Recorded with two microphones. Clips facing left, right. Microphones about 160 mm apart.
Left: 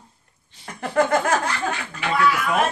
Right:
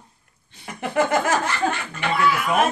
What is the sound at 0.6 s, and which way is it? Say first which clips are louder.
A woman's voice: left 1 dB; 5° right (ahead or behind).